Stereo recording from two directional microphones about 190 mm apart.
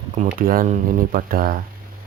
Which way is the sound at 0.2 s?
50° right (ahead or behind).